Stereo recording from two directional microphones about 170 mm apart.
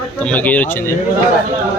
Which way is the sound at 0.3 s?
10° left (ahead or behind).